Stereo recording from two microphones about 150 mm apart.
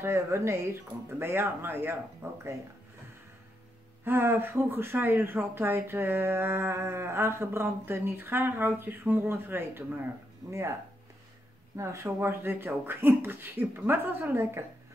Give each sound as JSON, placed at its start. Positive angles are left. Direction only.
{"t": 0.0, "sound": "speech", "side_deg": -20}
{"t": 4.0, "sound": "speech", "side_deg": -15}
{"t": 11.7, "sound": "speech", "side_deg": -20}